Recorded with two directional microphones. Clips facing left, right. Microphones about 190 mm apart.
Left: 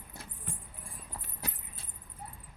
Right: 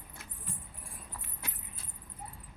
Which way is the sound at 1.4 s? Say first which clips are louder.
Left 5 dB; 35° left (ahead or behind).